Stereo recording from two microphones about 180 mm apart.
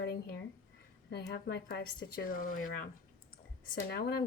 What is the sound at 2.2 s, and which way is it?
Speech, 50° left (ahead or behind).